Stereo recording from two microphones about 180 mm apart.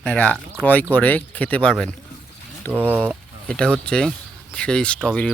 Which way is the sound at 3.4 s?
5° left (ahead or behind).